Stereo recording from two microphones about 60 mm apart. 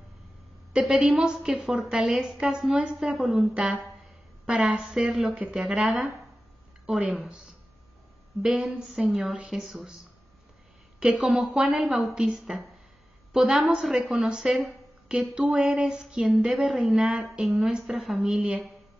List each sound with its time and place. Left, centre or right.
0.7 s a woman's voice: centre
8.4 s a woman's voice: centre
9.5 s speech: centre
11.0 s a woman's voice: centre
18.2 s a woman's voice: right